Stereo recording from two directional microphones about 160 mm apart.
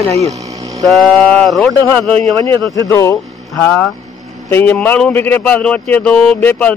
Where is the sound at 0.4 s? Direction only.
20° right (ahead or behind).